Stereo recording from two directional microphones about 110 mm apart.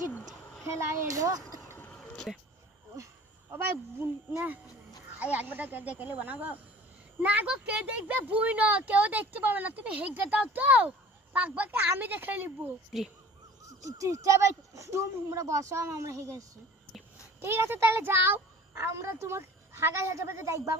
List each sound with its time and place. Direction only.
0.6 s speech: 25° right (ahead or behind)
1.6 s a sound: 20° left (ahead or behind)
2.0 s a sound: 10° left (ahead or behind)
3.5 s speech: 20° right (ahead or behind)
13.7 s speech: 30° right (ahead or behind)
17.4 s speech: 20° right (ahead or behind)